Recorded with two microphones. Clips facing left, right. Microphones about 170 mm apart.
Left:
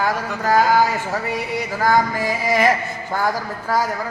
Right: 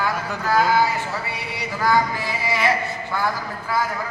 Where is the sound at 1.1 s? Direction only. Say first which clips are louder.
Left 7 dB; 45° left (ahead or behind).